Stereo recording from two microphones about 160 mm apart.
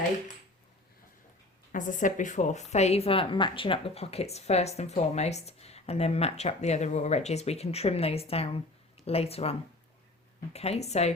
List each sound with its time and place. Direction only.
1.7 s speech: 55° left (ahead or behind)